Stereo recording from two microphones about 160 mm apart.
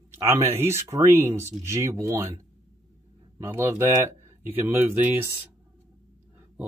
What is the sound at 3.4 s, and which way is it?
Speech, 15° right (ahead or behind).